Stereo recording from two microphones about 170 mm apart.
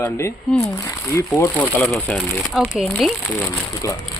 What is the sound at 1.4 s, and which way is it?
A man's voice, 5° left (ahead or behind).